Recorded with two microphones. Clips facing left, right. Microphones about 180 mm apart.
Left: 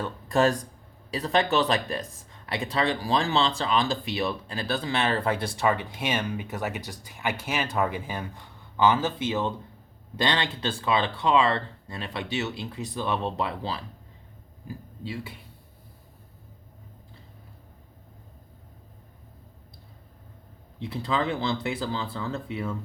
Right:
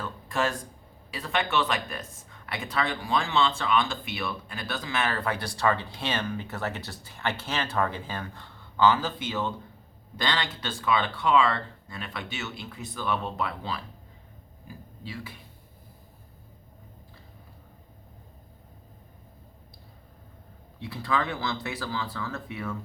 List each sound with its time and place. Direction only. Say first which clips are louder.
0.0 s speech: left 6 dB; 35° left (ahead or behind)
20.7 s speech: left 1 dB; 25° left (ahead or behind)